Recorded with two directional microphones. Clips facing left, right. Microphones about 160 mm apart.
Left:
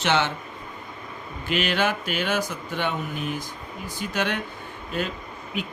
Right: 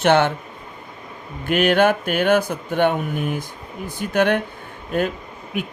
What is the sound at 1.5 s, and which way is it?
Speech, 55° right (ahead or behind).